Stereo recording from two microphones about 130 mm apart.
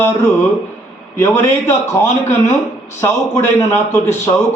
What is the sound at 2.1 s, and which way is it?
Speech, 65° left (ahead or behind).